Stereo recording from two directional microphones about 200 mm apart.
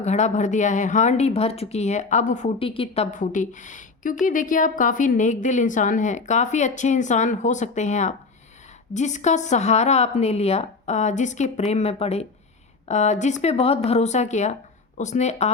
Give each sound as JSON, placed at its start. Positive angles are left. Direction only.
{"t": 0.0, "sound": "speech", "side_deg": 35}